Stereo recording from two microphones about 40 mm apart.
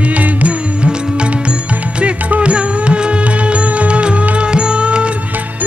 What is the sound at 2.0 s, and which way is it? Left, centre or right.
Music, right.